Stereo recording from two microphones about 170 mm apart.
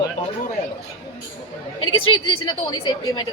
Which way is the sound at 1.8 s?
30° left (ahead or behind).